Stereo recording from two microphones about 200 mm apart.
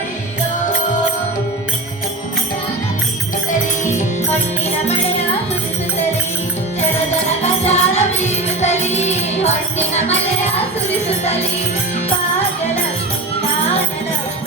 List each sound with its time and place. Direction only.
7.4 s music: 30° left (ahead or behind)